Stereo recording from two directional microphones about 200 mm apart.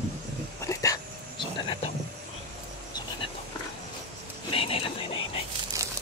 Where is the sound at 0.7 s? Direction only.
15° left (ahead or behind).